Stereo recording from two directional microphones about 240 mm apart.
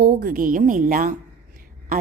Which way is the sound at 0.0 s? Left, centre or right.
Right.